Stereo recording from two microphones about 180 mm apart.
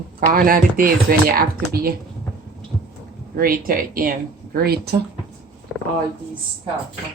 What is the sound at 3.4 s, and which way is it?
Speech, 55° right (ahead or behind).